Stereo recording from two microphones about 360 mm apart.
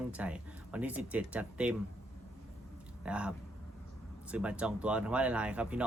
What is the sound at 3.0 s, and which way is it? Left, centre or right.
Speech, centre.